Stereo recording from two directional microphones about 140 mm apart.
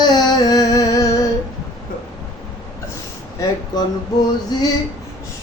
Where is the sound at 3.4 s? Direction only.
25° left (ahead or behind).